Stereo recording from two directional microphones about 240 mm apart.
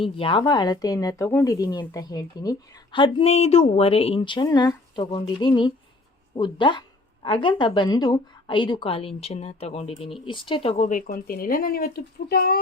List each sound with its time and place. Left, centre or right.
0.0 s speech: left
6.3 s a sound: centre
7.4 s a woman's voice: centre; by 12.5 s left